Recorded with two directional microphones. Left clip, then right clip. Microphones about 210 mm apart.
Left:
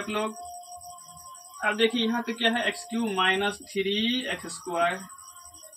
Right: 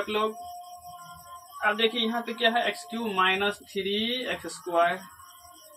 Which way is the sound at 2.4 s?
15° right (ahead or behind).